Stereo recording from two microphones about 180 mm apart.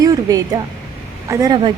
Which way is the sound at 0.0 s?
20° right (ahead or behind).